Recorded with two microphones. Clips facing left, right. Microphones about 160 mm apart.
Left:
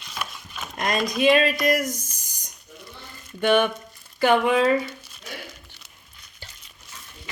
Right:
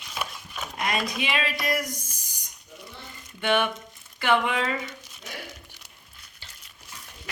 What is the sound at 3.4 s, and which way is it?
A woman's voice, 40° left (ahead or behind).